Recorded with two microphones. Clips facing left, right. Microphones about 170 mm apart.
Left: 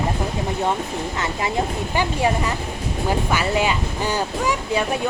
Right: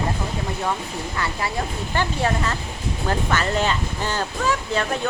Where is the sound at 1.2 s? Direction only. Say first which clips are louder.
Left 3 dB; 20° left (ahead or behind).